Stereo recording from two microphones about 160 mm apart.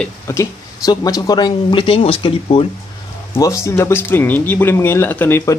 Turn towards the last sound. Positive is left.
turn(degrees=15)  # may be behind; listen again after turning